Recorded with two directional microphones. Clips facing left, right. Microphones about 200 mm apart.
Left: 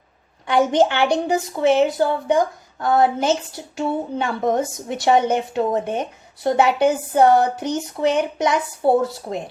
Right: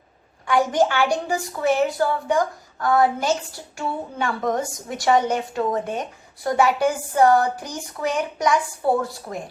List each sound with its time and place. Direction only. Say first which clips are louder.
0.4 s a woman's voice: left 3 dB; 20° left (ahead or behind)